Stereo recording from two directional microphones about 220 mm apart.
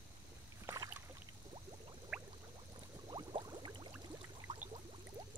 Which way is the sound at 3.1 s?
20° right (ahead or behind).